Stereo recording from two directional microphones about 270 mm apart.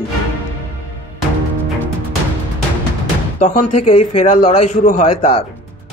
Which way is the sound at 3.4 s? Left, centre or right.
Left.